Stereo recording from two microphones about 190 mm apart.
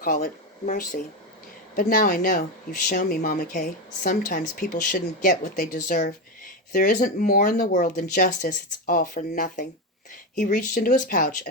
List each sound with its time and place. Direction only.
0.6 s speech: 40° left (ahead or behind)